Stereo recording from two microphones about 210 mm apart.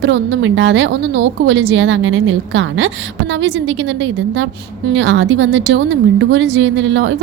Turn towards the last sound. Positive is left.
turn(degrees=-60)  # may be behind; listen again after turning